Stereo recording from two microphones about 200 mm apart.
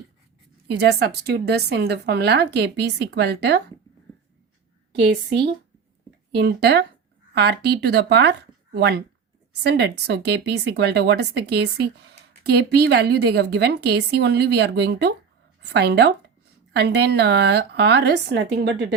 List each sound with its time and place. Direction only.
0.7 s speech: 55° right (ahead or behind)
6.3 s speech: 55° right (ahead or behind)